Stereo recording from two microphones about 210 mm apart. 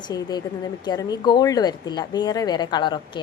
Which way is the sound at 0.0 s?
20° left (ahead or behind).